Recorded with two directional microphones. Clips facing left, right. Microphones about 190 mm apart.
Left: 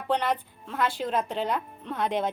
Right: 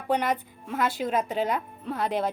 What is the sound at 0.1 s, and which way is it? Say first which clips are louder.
Speech: right 1 dB; 15° right (ahead or behind).